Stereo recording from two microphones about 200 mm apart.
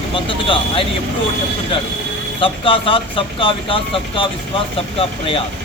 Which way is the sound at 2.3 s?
25° left (ahead or behind).